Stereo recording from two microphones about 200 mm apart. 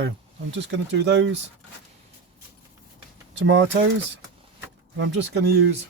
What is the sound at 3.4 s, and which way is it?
Speech, 65° right (ahead or behind).